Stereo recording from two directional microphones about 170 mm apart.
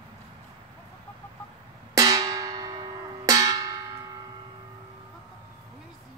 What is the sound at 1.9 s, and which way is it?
Music, 20° right (ahead or behind).